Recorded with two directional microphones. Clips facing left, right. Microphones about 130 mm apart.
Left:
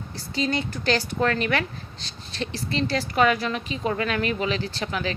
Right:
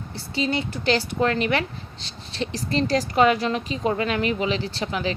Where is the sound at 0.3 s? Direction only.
25° right (ahead or behind).